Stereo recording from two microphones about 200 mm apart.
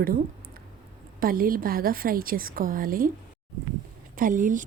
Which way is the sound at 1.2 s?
45° right (ahead or behind).